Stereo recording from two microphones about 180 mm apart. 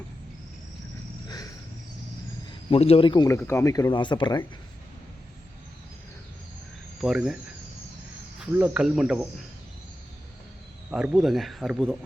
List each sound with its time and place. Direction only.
1.3 s cricket: 20° left (ahead or behind)
2.6 s speech: 30° left (ahead or behind)
7.0 s speech: centre (ahead or behind)
8.4 s speech: 5° right (ahead or behind)
10.9 s speech: 5° right (ahead or behind)